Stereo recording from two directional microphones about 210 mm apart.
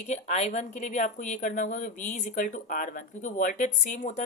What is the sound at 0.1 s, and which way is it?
Speech, 35° left (ahead or behind).